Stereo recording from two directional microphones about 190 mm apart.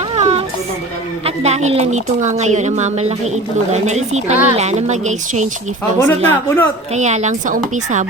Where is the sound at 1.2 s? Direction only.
35° right (ahead or behind).